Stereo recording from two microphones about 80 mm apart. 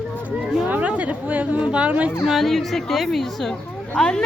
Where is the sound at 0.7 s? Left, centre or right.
Centre.